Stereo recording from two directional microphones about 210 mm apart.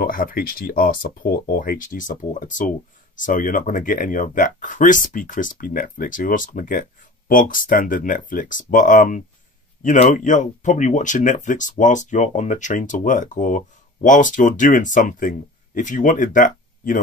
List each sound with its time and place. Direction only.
0.0 s speech: 40° left (ahead or behind)